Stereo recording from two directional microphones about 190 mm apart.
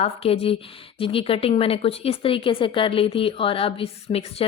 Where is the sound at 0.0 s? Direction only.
30° left (ahead or behind).